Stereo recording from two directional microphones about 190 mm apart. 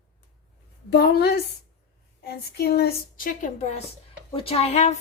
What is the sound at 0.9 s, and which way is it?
A woman's voice, 55° left (ahead or behind).